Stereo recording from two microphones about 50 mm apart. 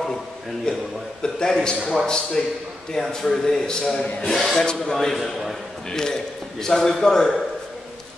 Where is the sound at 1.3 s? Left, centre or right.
Centre.